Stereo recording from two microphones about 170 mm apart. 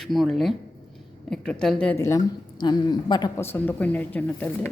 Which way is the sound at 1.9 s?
20° left (ahead or behind).